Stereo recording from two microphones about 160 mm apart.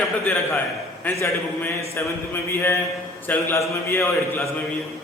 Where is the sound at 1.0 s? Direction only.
10° left (ahead or behind).